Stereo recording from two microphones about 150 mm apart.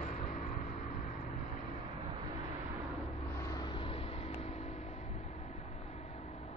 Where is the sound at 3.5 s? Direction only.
35° left (ahead or behind).